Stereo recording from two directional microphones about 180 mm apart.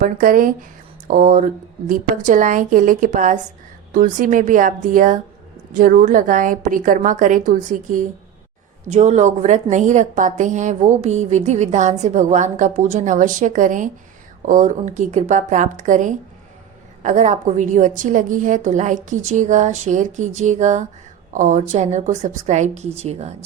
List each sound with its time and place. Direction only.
0.0 s a woman's voice: 50° right (ahead or behind)